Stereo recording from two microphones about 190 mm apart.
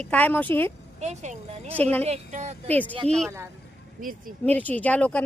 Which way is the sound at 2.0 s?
35° right (ahead or behind).